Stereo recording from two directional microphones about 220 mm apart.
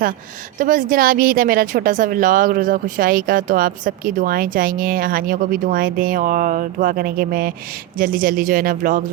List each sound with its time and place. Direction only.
0.6 s speech: 40° right (ahead or behind)